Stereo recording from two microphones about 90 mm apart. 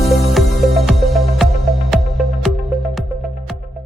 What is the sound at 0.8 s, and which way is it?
Music, centre (ahead or behind).